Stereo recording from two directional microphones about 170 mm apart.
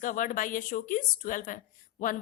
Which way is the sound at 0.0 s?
50° left (ahead or behind).